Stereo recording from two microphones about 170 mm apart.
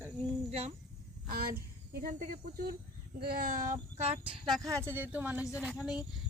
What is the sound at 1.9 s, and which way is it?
A child's voice, 60° right (ahead or behind).